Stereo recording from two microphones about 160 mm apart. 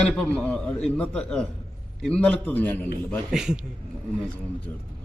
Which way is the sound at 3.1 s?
5° right (ahead or behind).